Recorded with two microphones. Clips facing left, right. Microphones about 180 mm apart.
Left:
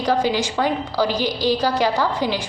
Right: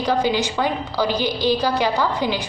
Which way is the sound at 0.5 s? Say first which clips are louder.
Left 1 dB; 40° left (ahead or behind).